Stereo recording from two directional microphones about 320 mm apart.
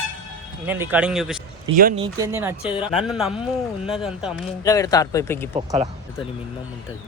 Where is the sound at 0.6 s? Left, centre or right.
Centre.